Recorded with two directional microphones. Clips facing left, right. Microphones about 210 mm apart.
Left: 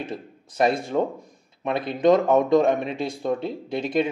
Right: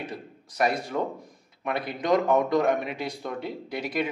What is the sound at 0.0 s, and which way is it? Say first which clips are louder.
Speech: left 4 dB; 25° left (ahead or behind).